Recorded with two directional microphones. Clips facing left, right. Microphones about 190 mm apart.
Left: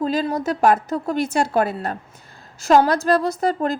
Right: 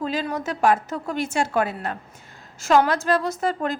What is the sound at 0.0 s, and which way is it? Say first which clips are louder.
A woman's voice: left 5 dB; 40° left (ahead or behind).